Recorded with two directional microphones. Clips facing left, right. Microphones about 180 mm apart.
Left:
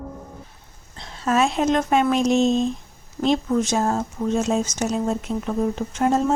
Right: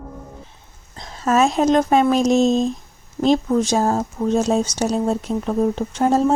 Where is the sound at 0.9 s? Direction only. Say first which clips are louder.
Right 3 dB; 40° right (ahead or behind).